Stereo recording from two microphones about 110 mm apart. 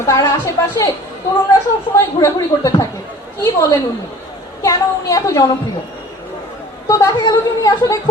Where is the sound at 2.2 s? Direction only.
30° left (ahead or behind).